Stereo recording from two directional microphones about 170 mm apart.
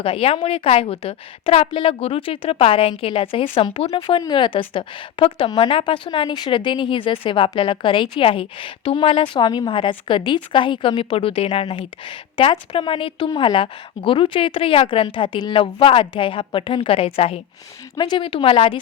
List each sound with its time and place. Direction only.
0.0 s a woman's voice: 35° left (ahead or behind)